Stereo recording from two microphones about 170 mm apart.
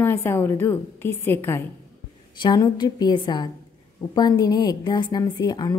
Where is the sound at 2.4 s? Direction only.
25° left (ahead or behind).